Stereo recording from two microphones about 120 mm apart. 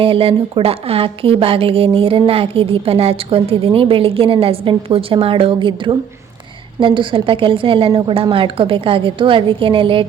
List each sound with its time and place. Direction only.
0.0 s a woman's voice: 50° right (ahead or behind)